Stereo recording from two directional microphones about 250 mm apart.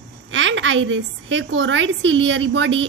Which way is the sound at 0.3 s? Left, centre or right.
Right.